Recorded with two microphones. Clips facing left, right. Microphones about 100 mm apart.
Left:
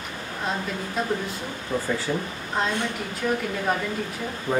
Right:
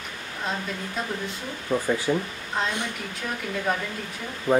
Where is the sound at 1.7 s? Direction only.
20° right (ahead or behind).